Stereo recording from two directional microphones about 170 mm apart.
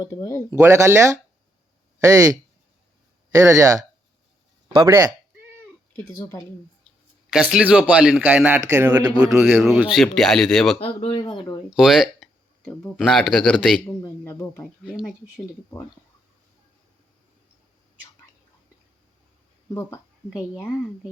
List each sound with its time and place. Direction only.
0.0 s speech: 20° left (ahead or behind)
0.5 s speech: 15° right (ahead or behind)
6.0 s speech: 15° left (ahead or behind)
7.5 s speech: 5° right (ahead or behind)
10.8 s speech: 35° left (ahead or behind)
11.8 s speech: centre (ahead or behind)
14.0 s speech: 15° left (ahead or behind)
19.7 s speech: 10° left (ahead or behind)